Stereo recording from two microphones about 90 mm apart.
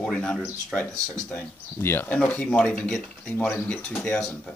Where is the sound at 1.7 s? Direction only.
25° left (ahead or behind); by 4.4 s 10° left (ahead or behind).